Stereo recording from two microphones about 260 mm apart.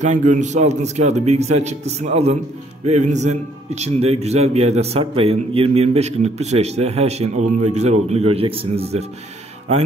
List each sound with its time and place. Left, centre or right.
0.0 s a man's voice: right